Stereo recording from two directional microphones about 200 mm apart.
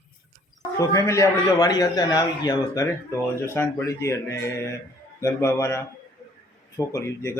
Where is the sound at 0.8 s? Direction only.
15° left (ahead or behind).